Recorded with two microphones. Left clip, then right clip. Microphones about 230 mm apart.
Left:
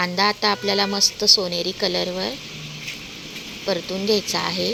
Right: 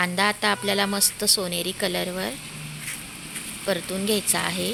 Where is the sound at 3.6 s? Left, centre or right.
Centre.